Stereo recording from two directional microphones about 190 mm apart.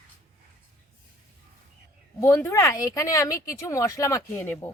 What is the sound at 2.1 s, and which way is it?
Speech, 15° left (ahead or behind).